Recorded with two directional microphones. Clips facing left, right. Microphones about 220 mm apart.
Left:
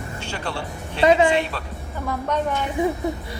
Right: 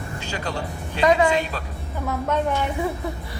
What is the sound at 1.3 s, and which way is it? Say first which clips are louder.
Speech: left 1 dB; 40° right (ahead or behind).